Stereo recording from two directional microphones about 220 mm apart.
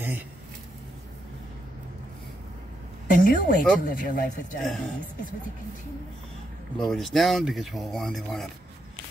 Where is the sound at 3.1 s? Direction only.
40° left (ahead or behind).